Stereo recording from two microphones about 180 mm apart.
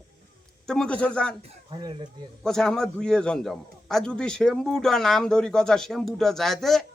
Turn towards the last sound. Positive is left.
turn(degrees=0)  # may be behind; listen again after turning